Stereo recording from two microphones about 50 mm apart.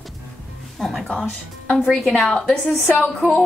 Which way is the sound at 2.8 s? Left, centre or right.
Left.